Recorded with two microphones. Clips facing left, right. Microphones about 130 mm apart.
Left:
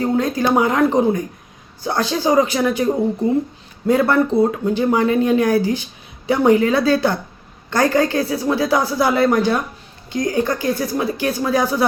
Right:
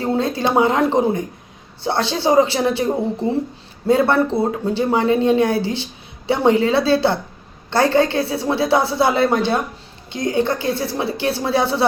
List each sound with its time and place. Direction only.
0.0 s speech: 30° right (ahead or behind)